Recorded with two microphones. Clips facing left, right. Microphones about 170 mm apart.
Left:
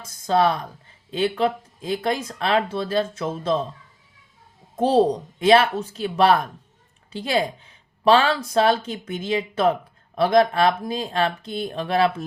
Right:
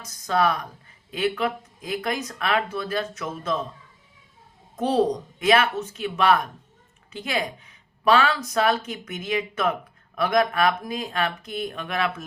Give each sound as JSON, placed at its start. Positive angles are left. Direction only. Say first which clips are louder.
{"t": 0.0, "sound": "speech", "louder": "left 3 dB", "side_deg": 30}
{"t": 4.8, "sound": "speech", "louder": "left 4 dB", "side_deg": 30}